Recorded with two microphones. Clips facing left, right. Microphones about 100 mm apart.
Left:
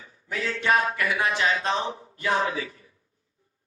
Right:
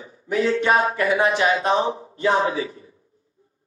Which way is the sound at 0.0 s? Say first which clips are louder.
Right 10 dB; 25° right (ahead or behind).